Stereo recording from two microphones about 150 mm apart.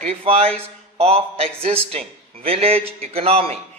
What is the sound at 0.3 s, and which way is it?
A man's voice, 40° right (ahead or behind).